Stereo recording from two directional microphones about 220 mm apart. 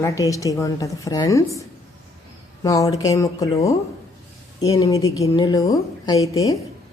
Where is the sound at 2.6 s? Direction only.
15° left (ahead or behind).